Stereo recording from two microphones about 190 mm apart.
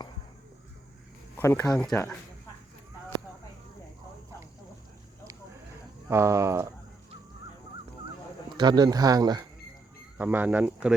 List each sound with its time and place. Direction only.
1.4 s speech: 15° left (ahead or behind)
6.1 s speech: 15° right (ahead or behind)
8.5 s speech: 20° right (ahead or behind)
10.2 s speech: 10° right (ahead or behind)